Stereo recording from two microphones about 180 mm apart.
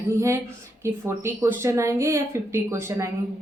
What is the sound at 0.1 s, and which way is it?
A woman's voice, 15° right (ahead or behind).